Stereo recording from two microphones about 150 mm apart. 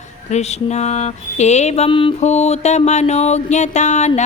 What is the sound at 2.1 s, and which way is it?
A woman's voice, 50° left (ahead or behind).